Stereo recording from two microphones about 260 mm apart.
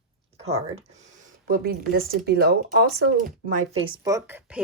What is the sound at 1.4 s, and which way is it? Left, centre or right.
Speech, right.